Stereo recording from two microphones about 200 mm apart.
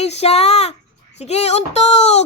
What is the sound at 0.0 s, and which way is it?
Speech, 30° left (ahead or behind).